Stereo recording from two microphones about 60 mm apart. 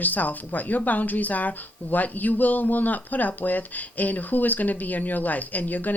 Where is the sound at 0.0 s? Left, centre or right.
Left.